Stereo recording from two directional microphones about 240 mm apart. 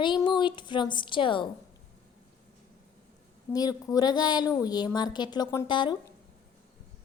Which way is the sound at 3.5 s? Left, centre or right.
Centre.